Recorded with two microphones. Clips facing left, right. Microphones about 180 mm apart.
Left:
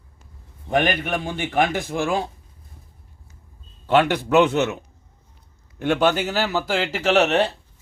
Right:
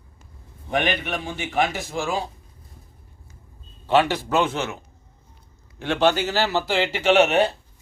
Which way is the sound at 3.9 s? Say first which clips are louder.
Left 3 dB; 55° left (ahead or behind).